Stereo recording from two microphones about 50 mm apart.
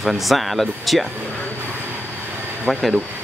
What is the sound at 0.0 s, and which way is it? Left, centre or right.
Speech, centre.